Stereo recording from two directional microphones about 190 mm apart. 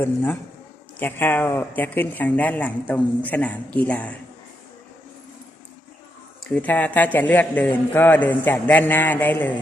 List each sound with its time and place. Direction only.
0.0 s a man's voice: 10° left (ahead or behind)
6.5 s a man's voice: 10° left (ahead or behind)